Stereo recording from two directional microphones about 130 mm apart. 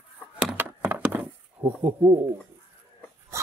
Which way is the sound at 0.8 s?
15° right (ahead or behind).